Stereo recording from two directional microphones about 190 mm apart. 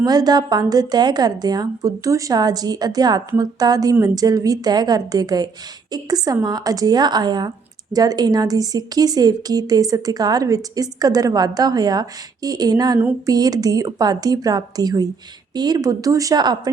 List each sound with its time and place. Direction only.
0.0 s a woman's voice: 20° right (ahead or behind)